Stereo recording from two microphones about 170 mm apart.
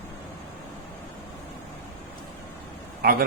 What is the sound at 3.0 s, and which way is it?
Speech, 65° right (ahead or behind).